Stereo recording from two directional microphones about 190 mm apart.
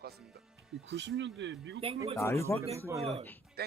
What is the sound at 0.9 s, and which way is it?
Speech, 70° right (ahead or behind).